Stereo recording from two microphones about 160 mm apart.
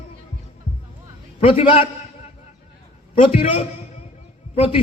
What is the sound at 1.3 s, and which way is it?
Speech, 35° left (ahead or behind).